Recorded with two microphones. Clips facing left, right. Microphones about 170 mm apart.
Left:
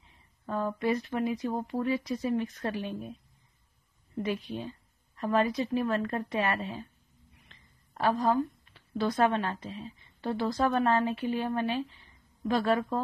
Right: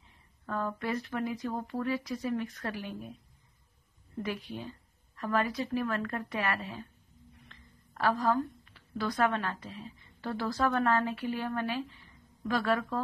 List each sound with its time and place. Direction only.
0.5 s speech: 20° left (ahead or behind)
4.2 s a woman's voice: 20° left (ahead or behind)